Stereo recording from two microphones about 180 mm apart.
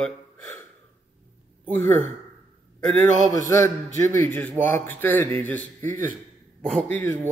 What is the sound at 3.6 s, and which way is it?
Speech, 45° right (ahead or behind).